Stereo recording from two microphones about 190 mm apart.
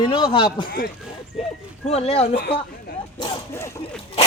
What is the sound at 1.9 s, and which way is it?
Speech, 30° left (ahead or behind).